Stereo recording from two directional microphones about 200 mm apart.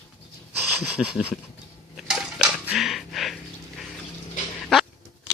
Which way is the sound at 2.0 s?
Centre (ahead or behind).